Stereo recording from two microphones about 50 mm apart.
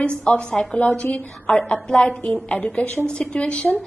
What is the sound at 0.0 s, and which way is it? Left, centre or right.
Speech, left.